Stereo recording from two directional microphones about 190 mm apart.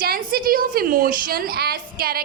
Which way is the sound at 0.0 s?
50° right (ahead or behind).